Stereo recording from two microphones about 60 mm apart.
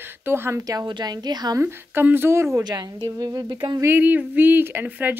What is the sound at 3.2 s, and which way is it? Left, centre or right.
Speech, right.